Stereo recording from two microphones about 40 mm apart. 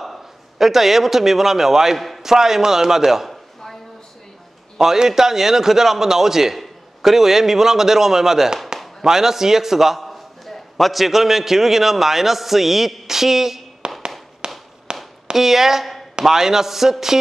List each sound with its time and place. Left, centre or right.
0.0 s a man's voice: centre
2.0 s a sound: centre
2.3 s a man's voice: centre
4.7 s a man's voice: centre
13.8 s fireworks: right
14.4 s a sound: right
15.3 s a man's voice: centre